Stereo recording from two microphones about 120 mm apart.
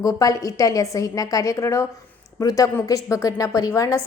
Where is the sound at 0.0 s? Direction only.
30° left (ahead or behind).